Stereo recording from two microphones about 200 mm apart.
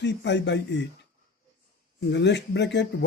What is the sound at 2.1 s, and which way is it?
Speech, 60° left (ahead or behind).